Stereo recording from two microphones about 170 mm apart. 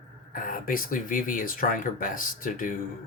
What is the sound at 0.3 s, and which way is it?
Speech, 55° left (ahead or behind).